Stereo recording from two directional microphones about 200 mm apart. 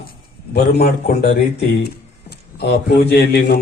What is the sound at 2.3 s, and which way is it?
A man's voice, 55° left (ahead or behind).